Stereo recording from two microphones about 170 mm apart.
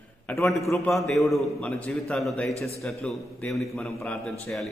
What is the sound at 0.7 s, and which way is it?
A man's voice, centre (ahead or behind).